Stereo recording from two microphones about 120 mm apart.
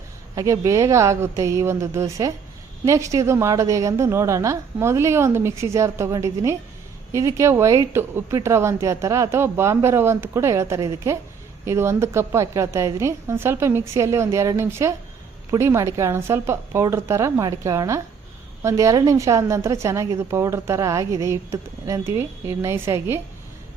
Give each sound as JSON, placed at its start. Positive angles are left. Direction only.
{"t": 0.3, "sound": "a woman's voice", "side_deg": -25}